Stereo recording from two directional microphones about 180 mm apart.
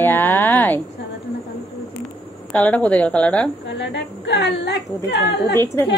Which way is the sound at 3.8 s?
75° left (ahead or behind).